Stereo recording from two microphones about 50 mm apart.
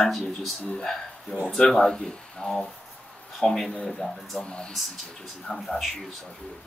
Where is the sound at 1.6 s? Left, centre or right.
Centre.